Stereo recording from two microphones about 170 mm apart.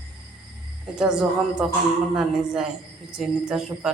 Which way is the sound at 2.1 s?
5° right (ahead or behind).